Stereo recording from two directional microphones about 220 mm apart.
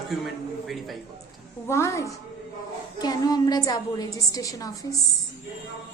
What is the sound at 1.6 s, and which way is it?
Mantra, 15° left (ahead or behind).